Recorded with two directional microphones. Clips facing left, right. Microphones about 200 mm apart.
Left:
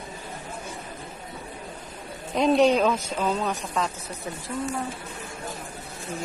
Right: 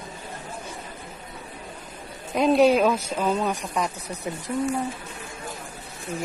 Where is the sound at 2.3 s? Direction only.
5° right (ahead or behind).